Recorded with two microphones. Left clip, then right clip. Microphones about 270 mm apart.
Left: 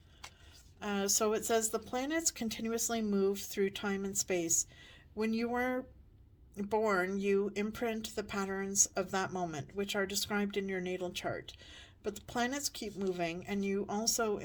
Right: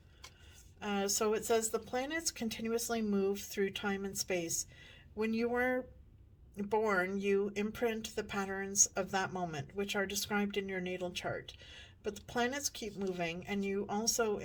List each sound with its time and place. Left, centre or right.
0.8 s speech: left